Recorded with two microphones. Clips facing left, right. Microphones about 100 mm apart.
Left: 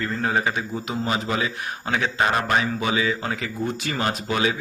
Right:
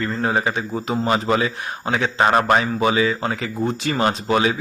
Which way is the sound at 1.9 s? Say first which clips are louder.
Right 4 dB; 30° right (ahead or behind).